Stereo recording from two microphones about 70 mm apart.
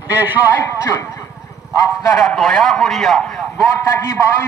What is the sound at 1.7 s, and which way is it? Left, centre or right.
Speech, left.